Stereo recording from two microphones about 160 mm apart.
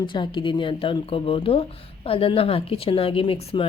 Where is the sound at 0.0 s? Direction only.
30° left (ahead or behind).